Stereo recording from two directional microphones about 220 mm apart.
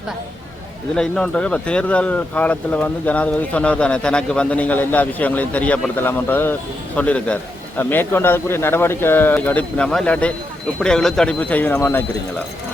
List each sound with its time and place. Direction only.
0.9 s speech: 5° left (ahead or behind)